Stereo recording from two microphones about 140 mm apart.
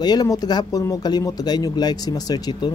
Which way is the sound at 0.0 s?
30° left (ahead or behind).